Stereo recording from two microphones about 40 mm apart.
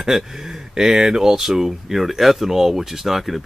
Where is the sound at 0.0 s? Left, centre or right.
Centre.